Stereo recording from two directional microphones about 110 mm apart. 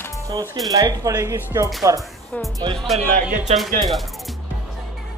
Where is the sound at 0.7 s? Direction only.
35° right (ahead or behind).